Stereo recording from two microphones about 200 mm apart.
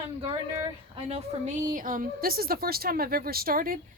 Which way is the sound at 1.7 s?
45° right (ahead or behind).